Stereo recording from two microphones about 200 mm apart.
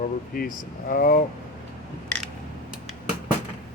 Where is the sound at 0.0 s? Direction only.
40° left (ahead or behind).